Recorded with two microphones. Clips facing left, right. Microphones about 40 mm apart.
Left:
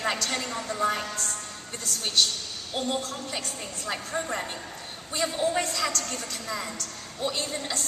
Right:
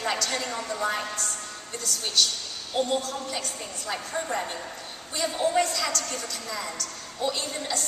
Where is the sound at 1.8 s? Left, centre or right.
Left.